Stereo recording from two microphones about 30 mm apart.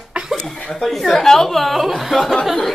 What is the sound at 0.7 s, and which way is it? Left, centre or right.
A woman's voice, centre.